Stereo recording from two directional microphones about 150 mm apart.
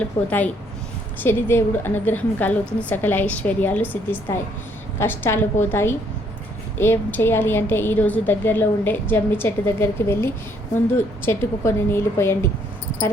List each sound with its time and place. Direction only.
0.3 s a woman's voice: 10° left (ahead or behind)